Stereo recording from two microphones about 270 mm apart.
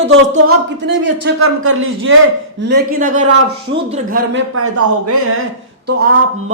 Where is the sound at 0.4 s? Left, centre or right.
Right.